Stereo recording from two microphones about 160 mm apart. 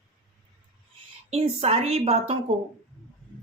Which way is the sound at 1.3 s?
40° right (ahead or behind).